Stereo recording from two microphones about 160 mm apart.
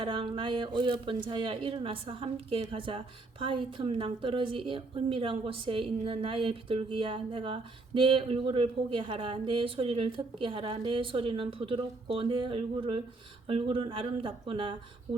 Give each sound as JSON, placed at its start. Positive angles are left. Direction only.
{"t": 0.0, "sound": "speech", "side_deg": -30}